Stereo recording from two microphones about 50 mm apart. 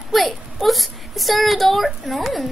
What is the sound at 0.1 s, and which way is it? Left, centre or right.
Speech, centre.